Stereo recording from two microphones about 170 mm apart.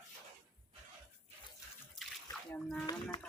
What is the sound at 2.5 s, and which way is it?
Speech, 5° left (ahead or behind).